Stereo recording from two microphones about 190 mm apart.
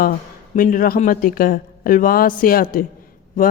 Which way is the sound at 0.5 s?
45° left (ahead or behind).